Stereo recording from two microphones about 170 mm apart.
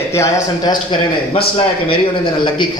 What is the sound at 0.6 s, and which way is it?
Speech, 25° left (ahead or behind).